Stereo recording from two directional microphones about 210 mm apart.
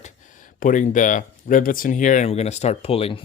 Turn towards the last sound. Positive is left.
turn(degrees=30)  # may be behind; listen again after turning